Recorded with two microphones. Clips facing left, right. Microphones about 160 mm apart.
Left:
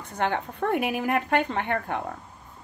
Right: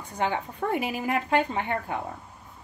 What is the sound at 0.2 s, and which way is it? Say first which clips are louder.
Speech: left 1 dB; 60° left (ahead or behind).